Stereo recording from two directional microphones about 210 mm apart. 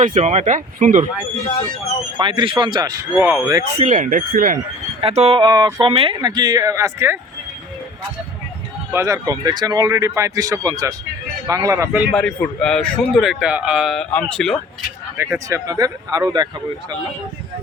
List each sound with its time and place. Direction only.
0.0 s speech: 35° right (ahead or behind)
2.1 s speech: 25° right (ahead or behind)
3.8 s speech: 35° right (ahead or behind)
4.9 s speech: 30° right (ahead or behind); by 7.2 s 15° right (ahead or behind)
8.9 s speech: 15° right (ahead or behind)
12.1 s a man's voice: 5° left (ahead or behind)
15.4 s speech: 15° right (ahead or behind)